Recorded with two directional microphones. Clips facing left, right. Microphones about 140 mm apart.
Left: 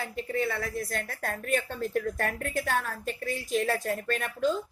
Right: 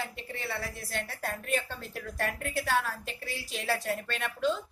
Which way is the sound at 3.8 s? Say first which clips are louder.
Left 4 dB; 40° left (ahead or behind).